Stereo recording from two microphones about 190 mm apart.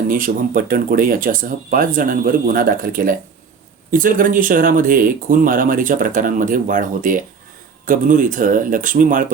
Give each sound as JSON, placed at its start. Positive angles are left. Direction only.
{"t": 0.1, "sound": "speech", "side_deg": -45}